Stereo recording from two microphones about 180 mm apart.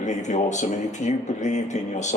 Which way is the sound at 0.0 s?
40° left (ahead or behind).